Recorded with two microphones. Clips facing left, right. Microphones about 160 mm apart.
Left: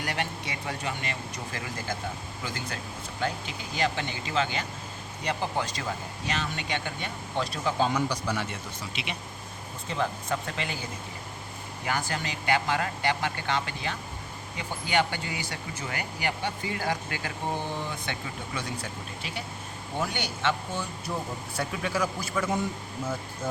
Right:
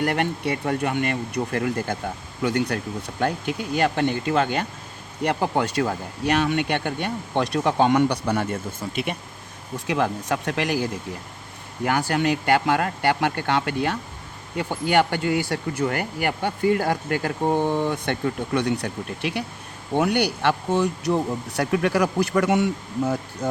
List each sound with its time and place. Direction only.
0.0 s speech: 55° right (ahead or behind)
9.8 s speech: 75° right (ahead or behind)
11.8 s speech: 60° right (ahead or behind)